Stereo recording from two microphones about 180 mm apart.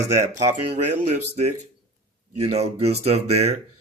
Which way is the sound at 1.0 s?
40° right (ahead or behind).